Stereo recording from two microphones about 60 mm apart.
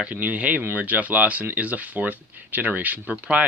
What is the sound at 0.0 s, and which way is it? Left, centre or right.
Speech, right.